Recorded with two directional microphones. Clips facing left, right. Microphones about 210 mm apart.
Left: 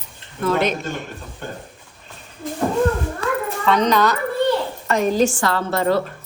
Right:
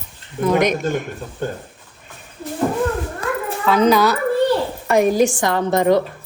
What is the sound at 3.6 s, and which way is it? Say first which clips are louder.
Speech: right 3 dB; 5° right (ahead or behind).